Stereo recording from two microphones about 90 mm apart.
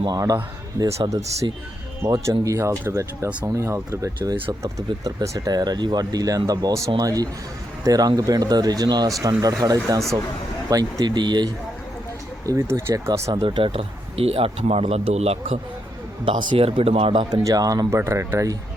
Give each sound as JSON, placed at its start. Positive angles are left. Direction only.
{"t": 0.0, "sound": "speech", "side_deg": -45}
{"t": 5.5, "sound": "speech", "side_deg": -50}
{"t": 12.5, "sound": "speech", "side_deg": -30}
{"t": 13.4, "sound": "speech", "side_deg": -80}
{"t": 16.2, "sound": "speech", "side_deg": -60}
{"t": 17.4, "sound": "speech", "side_deg": -40}
{"t": 17.9, "sound": "speech", "side_deg": -30}